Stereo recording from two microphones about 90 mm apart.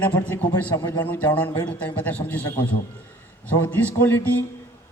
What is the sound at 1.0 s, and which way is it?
A man's voice, 15° left (ahead or behind).